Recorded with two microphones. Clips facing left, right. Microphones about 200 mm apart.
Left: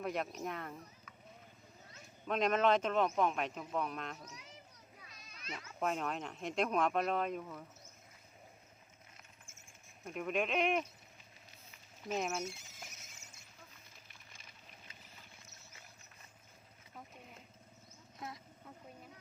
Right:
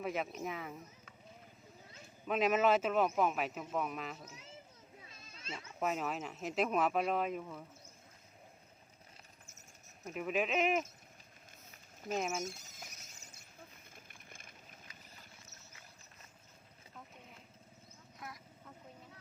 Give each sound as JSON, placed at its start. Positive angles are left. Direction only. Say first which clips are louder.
{"t": 0.0, "sound": "a man's voice", "louder": "even", "side_deg": 0}
{"t": 2.2, "sound": "a man's voice", "louder": "right 1 dB", "side_deg": -5}
{"t": 4.2, "sound": "children playing", "louder": "right 1 dB", "side_deg": -25}
{"t": 5.8, "sound": "a man's voice", "louder": "even", "side_deg": -5}
{"t": 9.5, "sound": "a sound", "louder": "right 1 dB", "side_deg": -40}
{"t": 10.1, "sound": "a man's voice", "louder": "right 1 dB", "side_deg": -5}
{"t": 12.1, "sound": "a man's voice", "louder": "right 1 dB", "side_deg": 0}
{"t": 12.5, "sound": "speech", "louder": "right 1 dB", "side_deg": -40}
{"t": 13.9, "sound": "a sound", "louder": "right 4 dB", "side_deg": -50}
{"t": 18.2, "sound": "vehicle", "louder": "left 3 dB", "side_deg": 25}